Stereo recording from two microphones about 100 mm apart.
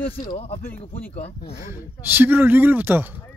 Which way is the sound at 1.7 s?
20° right (ahead or behind).